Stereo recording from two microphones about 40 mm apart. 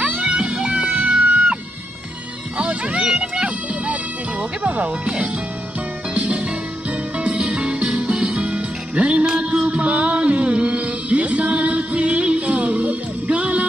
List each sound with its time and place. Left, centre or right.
0.0 s music: right
2.5 s music: right